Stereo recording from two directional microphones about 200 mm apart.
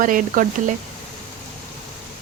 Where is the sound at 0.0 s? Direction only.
40° right (ahead or behind).